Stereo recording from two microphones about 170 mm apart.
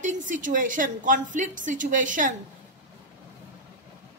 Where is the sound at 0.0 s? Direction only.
50° right (ahead or behind).